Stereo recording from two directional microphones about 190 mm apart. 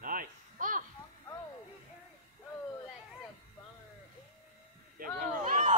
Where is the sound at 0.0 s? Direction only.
50° right (ahead or behind).